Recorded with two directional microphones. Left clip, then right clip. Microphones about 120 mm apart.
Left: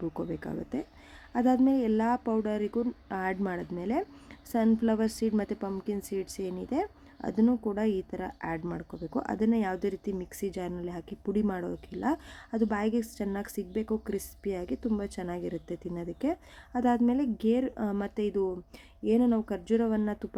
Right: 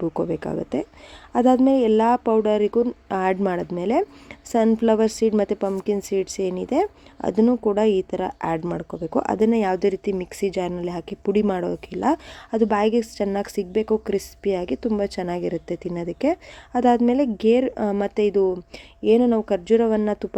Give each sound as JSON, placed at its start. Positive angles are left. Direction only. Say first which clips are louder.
{"t": 0.3, "sound": "a woman's voice", "louder": "right 11 dB", "side_deg": -25}